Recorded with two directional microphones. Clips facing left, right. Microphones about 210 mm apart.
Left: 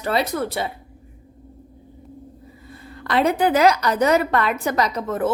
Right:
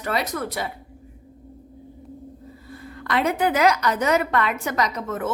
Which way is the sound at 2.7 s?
30° left (ahead or behind).